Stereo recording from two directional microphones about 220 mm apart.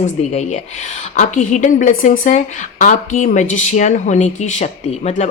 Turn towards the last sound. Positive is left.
turn(degrees=30)  # may be behind; listen again after turning